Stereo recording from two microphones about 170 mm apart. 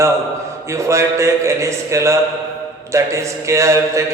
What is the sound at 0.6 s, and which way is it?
A man's voice, 15° right (ahead or behind).